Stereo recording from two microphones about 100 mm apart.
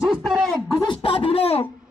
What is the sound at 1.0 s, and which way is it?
Speech, 70° left (ahead or behind).